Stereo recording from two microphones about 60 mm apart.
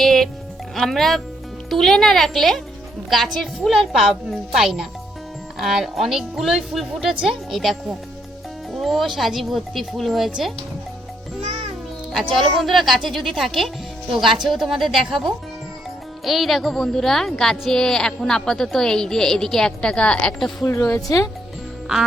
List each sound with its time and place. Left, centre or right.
0.0 s music: centre
0.8 s speech: centre
3.7 s a child's voice: centre
12.1 s a woman's voice: centre
20.8 s speech: left